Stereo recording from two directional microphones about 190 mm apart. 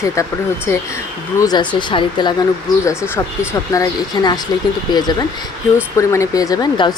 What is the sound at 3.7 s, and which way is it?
A woman's voice, 20° left (ahead or behind).